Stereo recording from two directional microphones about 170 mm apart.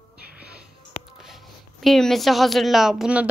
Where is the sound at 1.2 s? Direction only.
Centre (ahead or behind).